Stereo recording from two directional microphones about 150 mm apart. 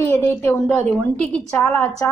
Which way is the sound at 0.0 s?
15° left (ahead or behind).